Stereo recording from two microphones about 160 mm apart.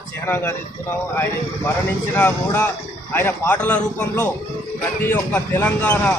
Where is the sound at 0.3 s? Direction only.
15° left (ahead or behind).